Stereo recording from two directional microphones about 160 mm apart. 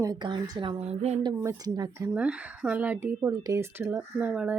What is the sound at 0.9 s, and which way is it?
Speech, 40° right (ahead or behind).